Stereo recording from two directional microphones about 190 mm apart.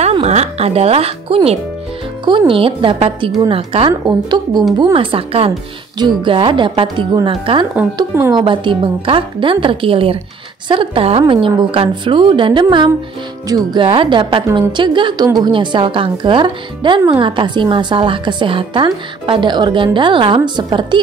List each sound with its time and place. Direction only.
0.0 s a woman's voice: 35° right (ahead or behind)